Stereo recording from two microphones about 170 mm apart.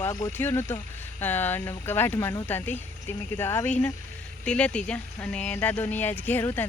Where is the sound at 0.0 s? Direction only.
15° left (ahead or behind).